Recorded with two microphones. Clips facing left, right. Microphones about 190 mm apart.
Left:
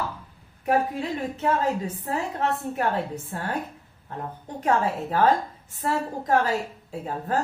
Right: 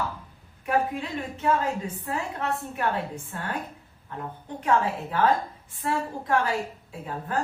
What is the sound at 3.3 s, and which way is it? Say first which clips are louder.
Speech: left 4 dB; 40° left (ahead or behind).